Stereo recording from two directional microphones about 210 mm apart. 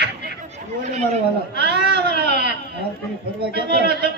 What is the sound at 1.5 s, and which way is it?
A woman's voice, 50° right (ahead or behind).